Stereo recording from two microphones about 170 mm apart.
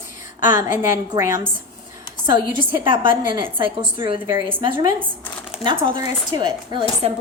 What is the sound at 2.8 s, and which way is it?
Speech, 30° right (ahead or behind).